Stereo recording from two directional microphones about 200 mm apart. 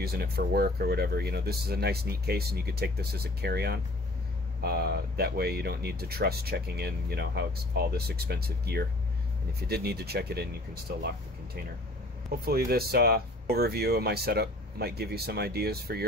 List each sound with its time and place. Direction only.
0.0 s speech: 50° right (ahead or behind)
12.3 s speech: 50° right (ahead or behind)